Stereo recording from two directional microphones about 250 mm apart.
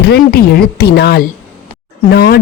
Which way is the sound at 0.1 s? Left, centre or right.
Left.